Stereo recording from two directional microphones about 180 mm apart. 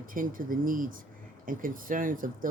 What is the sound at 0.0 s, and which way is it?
Speech, 50° right (ahead or behind).